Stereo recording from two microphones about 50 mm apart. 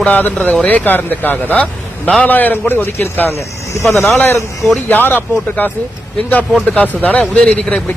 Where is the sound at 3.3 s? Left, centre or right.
Left.